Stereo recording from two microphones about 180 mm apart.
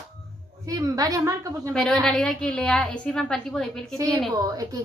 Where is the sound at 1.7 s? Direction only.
Centre (ahead or behind).